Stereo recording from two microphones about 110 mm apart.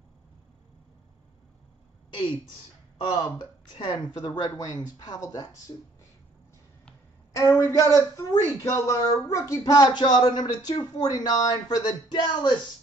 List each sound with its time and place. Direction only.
3.0 s speech: 45° left (ahead or behind)
7.3 s speech: 25° left (ahead or behind)